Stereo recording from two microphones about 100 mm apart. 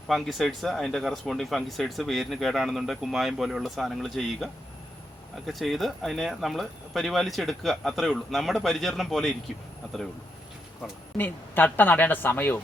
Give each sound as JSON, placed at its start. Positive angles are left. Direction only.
{"t": 0.1, "sound": "speech", "side_deg": 0}
{"t": 5.5, "sound": "speech", "side_deg": 0}
{"t": 11.2, "sound": "speech", "side_deg": 20}